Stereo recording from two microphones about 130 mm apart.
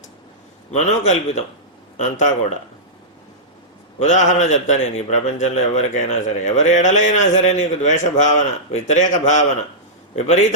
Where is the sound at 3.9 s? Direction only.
65° left (ahead or behind).